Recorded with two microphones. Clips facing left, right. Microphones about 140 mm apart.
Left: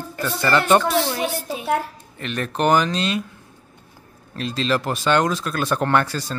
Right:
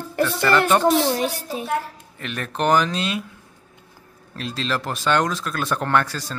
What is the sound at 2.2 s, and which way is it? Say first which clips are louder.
Speech: left 3 dB; centre (ahead or behind).